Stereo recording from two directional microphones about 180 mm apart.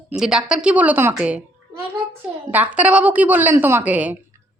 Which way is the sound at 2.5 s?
10° right (ahead or behind).